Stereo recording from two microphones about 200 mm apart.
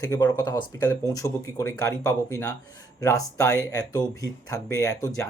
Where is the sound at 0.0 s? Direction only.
15° left (ahead or behind).